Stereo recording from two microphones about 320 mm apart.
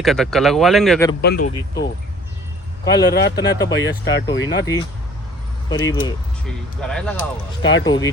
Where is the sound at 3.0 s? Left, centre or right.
Left.